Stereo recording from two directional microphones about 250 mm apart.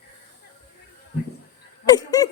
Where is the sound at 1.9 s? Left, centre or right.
Centre.